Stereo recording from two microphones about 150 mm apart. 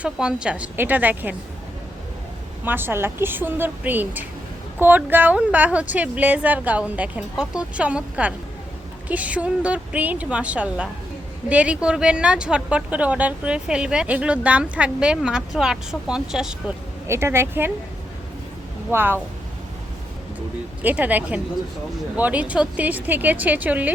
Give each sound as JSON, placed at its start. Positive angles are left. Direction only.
{"t": 0.0, "sound": "a woman's voice", "side_deg": -5}
{"t": 2.6, "sound": "a woman's voice", "side_deg": -15}
{"t": 17.1, "sound": "a woman's voice", "side_deg": -15}
{"t": 18.9, "sound": "a woman's voice", "side_deg": -15}
{"t": 20.8, "sound": "a woman's voice", "side_deg": -10}